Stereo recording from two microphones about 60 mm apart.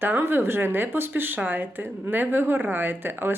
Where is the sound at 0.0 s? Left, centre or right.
Right.